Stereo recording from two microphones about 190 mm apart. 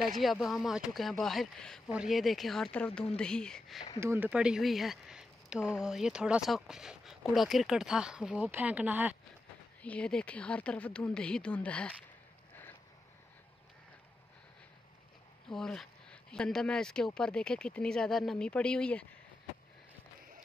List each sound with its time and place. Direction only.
0.2 s speech: centre (ahead or behind)
4.0 s speech: 10° right (ahead or behind)
9.8 s speech: 5° left (ahead or behind)
15.5 s speech: centre (ahead or behind)